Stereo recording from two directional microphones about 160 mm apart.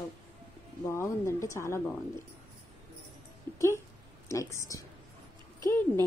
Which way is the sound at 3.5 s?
25° right (ahead or behind).